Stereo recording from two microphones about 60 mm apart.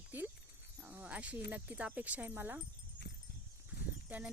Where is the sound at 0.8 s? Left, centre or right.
Right.